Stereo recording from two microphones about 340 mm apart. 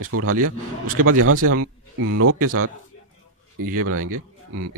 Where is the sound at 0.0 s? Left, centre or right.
Right.